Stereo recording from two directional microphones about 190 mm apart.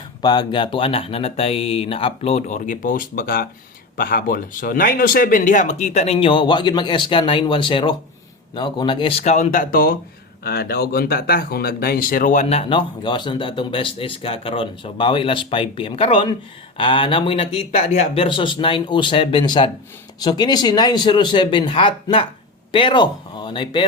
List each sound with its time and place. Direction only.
0.2 s speech: 20° left (ahead or behind)